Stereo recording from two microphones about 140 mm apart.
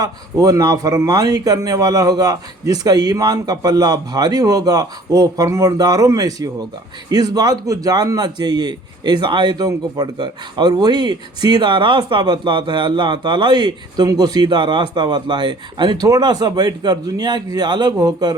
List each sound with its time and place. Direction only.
0.0 s a man's voice: 25° right (ahead or behind)